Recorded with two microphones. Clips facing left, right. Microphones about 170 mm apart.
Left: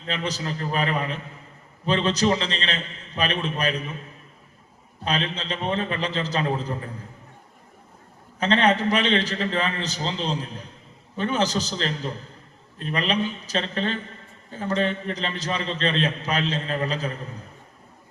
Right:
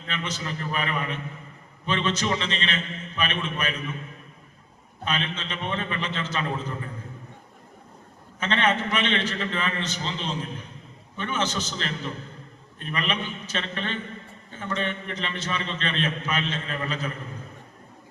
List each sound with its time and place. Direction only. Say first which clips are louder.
0.1 s a man's voice: left 4 dB; 35° left (ahead or behind)
5.0 s a man's voice: left 3 dB; 35° left (ahead or behind)
8.4 s a man's voice: left 4 dB; 35° left (ahead or behind)